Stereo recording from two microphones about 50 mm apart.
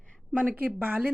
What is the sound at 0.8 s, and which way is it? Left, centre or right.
Speech, right.